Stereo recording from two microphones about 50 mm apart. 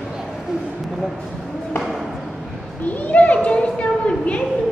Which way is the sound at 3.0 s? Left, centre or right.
Left.